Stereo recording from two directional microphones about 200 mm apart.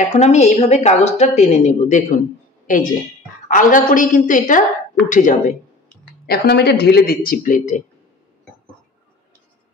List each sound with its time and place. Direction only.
0.0 s a woman's voice: 35° left (ahead or behind)
6.2 s speech: 50° left (ahead or behind)